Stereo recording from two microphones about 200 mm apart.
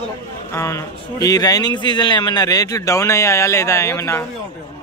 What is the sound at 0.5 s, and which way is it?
A man's voice, 15° left (ahead or behind).